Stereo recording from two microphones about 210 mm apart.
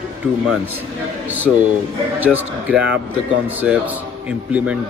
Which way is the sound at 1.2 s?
10° right (ahead or behind).